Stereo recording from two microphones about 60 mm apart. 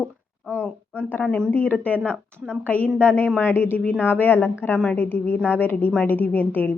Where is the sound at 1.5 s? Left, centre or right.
Left.